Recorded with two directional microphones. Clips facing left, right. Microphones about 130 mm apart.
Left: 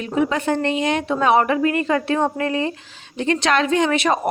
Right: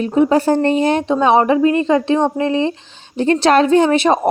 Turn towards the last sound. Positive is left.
turn(degrees=-30)  # may be behind; listen again after turning